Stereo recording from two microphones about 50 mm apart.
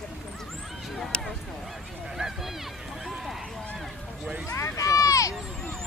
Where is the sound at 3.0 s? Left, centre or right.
Centre.